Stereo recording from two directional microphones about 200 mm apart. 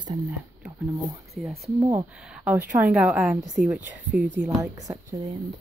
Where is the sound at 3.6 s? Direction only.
45° right (ahead or behind).